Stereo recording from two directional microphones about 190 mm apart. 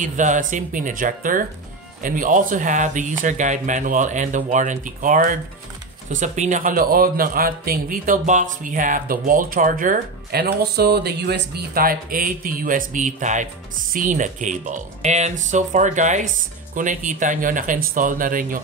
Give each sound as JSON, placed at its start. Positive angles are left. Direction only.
{"t": 0.0, "sound": "a man's voice", "side_deg": -40}